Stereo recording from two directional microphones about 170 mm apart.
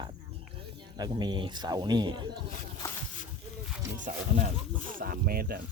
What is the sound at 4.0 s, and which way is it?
Speech, 50° right (ahead or behind).